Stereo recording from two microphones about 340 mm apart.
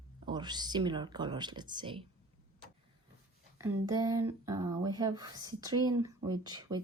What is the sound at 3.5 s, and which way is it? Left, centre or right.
Speech, centre.